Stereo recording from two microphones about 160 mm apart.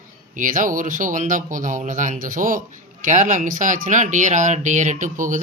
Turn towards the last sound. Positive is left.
turn(degrees=-55)  # may be behind; listen again after turning